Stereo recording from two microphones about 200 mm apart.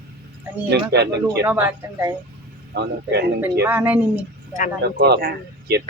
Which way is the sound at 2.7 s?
55° right (ahead or behind).